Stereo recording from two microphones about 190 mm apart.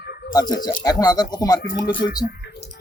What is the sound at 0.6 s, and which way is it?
Speech, 45° left (ahead or behind).